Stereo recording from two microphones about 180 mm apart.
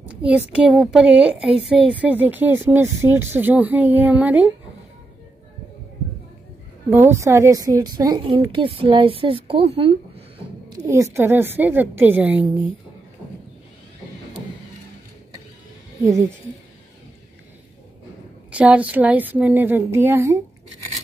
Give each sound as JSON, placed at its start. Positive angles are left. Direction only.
{"t": 0.0, "sound": "a woman's voice", "side_deg": -5}
{"t": 6.9, "sound": "a woman's voice", "side_deg": -15}
{"t": 11.1, "sound": "a woman's voice", "side_deg": -10}
{"t": 18.5, "sound": "a woman's voice", "side_deg": -5}